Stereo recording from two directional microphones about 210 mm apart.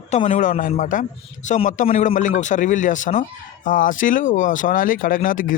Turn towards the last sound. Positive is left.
turn(degrees=40)  # may be behind; listen again after turning